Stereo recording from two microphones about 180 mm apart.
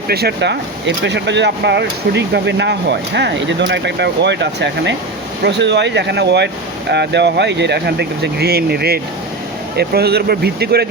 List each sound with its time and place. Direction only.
0.1 s speech: 60° right (ahead or behind); by 3.5 s 85° right
3.7 s speech: 70° right (ahead or behind)